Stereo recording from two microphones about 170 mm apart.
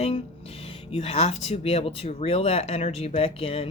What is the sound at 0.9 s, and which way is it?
Speech, 35° left (ahead or behind).